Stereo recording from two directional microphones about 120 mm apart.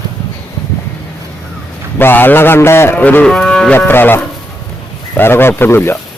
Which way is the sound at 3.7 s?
20° left (ahead or behind).